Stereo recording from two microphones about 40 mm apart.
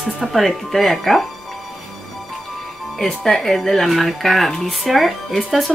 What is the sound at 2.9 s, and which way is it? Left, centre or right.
Speech, centre.